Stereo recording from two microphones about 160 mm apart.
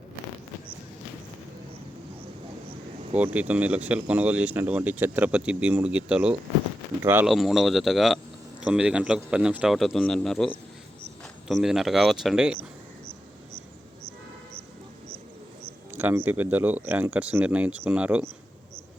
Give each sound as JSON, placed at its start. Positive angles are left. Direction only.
{"t": 3.2, "sound": "speech", "side_deg": -10}
{"t": 7.3, "sound": "a man's voice", "side_deg": 0}
{"t": 15.9, "sound": "speech", "side_deg": -10}